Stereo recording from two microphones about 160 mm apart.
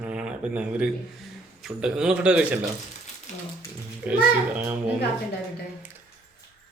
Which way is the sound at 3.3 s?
45° left (ahead or behind).